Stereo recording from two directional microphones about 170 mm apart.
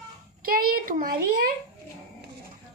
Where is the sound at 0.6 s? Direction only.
55° right (ahead or behind).